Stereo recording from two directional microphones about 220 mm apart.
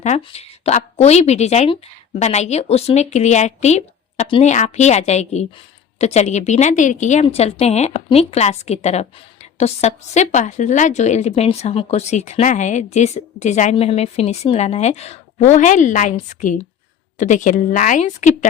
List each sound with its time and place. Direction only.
0.0 s a woman's voice: 30° left (ahead or behind)